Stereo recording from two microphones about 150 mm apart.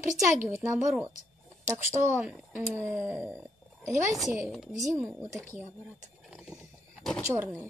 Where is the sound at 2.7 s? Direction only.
15° right (ahead or behind).